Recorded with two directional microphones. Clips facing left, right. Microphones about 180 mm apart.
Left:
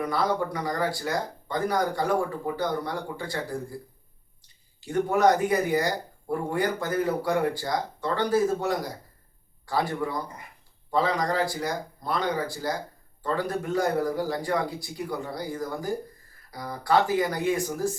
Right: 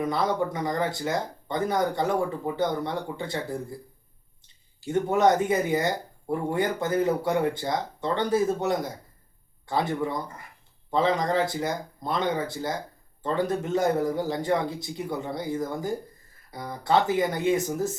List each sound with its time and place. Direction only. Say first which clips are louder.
0.0 s speech: right 1 dB; 20° right (ahead or behind)
4.9 s speech: even; 25° right (ahead or behind)